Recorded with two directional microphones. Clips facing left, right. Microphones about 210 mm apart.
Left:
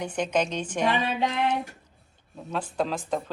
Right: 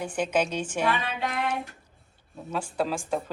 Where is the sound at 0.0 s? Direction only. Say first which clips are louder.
Even; 5° right (ahead or behind).